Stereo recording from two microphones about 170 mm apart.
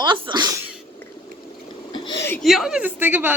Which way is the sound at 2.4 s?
Centre (ahead or behind).